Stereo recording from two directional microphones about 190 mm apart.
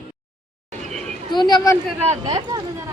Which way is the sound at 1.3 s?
20° left (ahead or behind).